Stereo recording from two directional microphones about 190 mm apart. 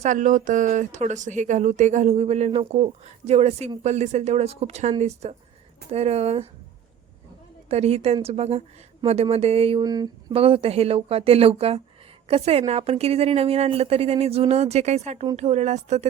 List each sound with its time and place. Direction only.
0.0 s speech: 40° right (ahead or behind)
7.7 s speech: 35° right (ahead or behind)
9.8 s speech: 20° right (ahead or behind); by 16.0 s 35° right (ahead or behind)